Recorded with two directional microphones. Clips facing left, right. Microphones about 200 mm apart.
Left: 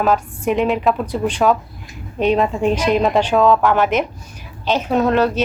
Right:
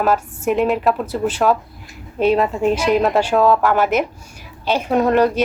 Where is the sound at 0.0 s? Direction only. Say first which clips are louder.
Left 1 dB; 5° right (ahead or behind).